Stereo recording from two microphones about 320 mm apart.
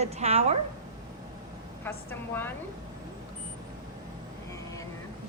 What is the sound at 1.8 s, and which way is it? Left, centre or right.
Speech, centre.